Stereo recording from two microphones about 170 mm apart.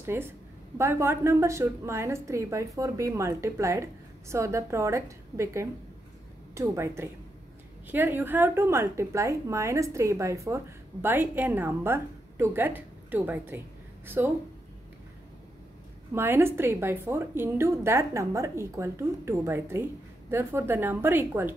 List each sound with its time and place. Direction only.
0.0 s a woman's voice: 15° right (ahead or behind)
16.2 s a woman's voice: 15° right (ahead or behind)